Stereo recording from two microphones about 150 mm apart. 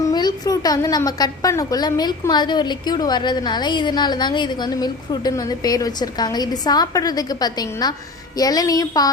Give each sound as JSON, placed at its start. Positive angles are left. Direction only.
{"t": 0.0, "sound": "a woman's voice", "side_deg": 25}